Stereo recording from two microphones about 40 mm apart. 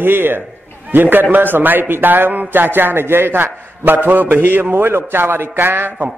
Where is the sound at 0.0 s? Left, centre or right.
Right.